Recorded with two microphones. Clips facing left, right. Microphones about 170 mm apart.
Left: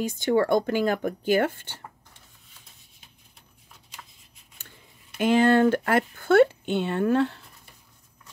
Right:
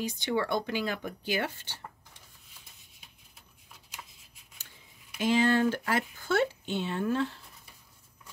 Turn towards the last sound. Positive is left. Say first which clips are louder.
# left 7 dB
turn(degrees=60)  # may be behind; listen again after turning